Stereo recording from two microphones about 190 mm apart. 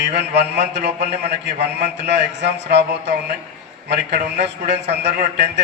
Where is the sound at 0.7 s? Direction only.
65° right (ahead or behind).